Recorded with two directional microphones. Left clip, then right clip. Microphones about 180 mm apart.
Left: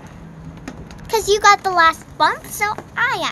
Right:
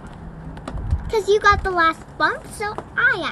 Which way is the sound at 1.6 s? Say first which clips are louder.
Left 4 dB; 90° left.